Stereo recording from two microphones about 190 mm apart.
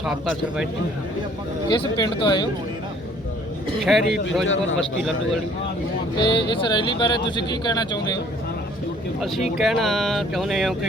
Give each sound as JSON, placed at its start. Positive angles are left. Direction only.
{"t": 0.0, "sound": "speech", "side_deg": -5}
{"t": 1.7, "sound": "speech", "side_deg": 25}
{"t": 3.8, "sound": "speech", "side_deg": 0}
{"t": 4.4, "sound": "a man's voice", "side_deg": 90}
{"t": 6.2, "sound": "speech", "side_deg": 25}
{"t": 9.2, "sound": "speech", "side_deg": 0}